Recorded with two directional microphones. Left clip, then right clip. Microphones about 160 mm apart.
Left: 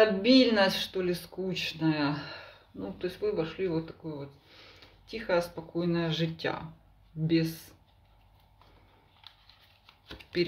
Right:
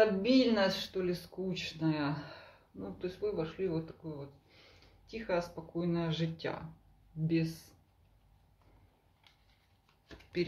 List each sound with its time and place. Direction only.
0.0 s speech: 20° left (ahead or behind)
10.3 s speech: 20° left (ahead or behind)